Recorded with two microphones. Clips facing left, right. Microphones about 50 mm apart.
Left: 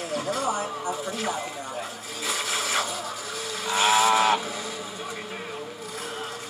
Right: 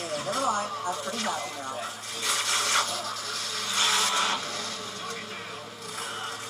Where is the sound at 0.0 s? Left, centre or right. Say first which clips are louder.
Left 1 dB; centre.